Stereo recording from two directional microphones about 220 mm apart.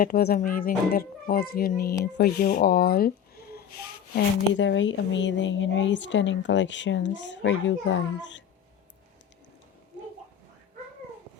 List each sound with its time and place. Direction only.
0.0 s a child's voice: 45° left (ahead or behind)
4.1 s a woman's voice: 50° left (ahead or behind)